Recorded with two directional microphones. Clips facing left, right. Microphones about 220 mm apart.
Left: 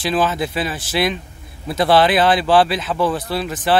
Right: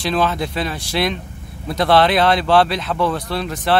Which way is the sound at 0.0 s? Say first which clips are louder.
Even; 5° left (ahead or behind).